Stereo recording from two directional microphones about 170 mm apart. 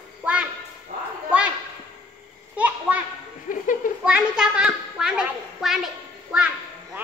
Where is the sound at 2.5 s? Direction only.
10° right (ahead or behind).